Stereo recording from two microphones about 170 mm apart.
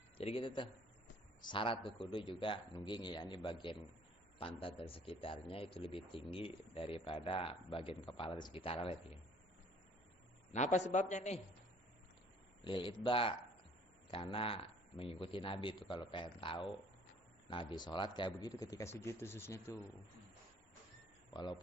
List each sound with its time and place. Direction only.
0.2 s a man's voice: 35° left (ahead or behind)
10.5 s a man's voice: 45° left (ahead or behind)
12.6 s a man's voice: 30° left (ahead or behind)
21.3 s a man's voice: 25° left (ahead or behind)